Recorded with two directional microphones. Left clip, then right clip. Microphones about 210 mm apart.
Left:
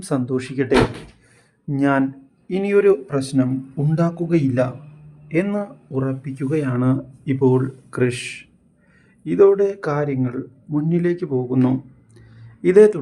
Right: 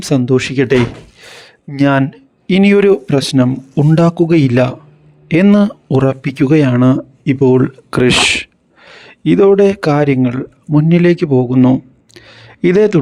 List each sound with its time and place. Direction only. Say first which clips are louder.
0.0 s speech: right 10 dB; 40° right (ahead or behind)
1.2 s a sound: right 11 dB; 40° right (ahead or behind)
2.5 s speech: right 6 dB; 45° right (ahead or behind)